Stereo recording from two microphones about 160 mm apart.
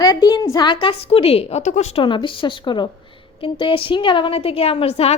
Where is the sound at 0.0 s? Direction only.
25° left (ahead or behind).